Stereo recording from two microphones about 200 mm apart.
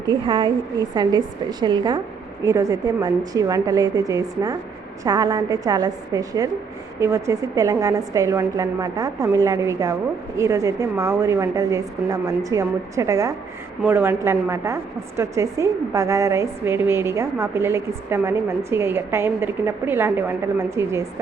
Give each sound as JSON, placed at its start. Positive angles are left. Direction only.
{"t": 0.1, "sound": "a woman's voice", "side_deg": -25}